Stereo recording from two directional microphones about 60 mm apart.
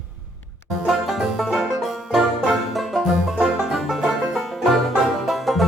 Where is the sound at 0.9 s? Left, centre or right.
Centre.